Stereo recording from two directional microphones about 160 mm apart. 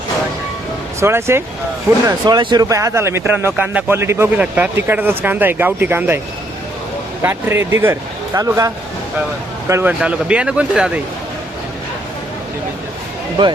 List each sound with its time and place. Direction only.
0.9 s speech: 15° right (ahead or behind)
2.0 s speech: 25° right (ahead or behind)
7.2 s speech: 15° right (ahead or behind)